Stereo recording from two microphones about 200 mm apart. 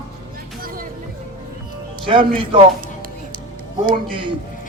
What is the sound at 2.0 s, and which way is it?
Speech, 25° right (ahead or behind).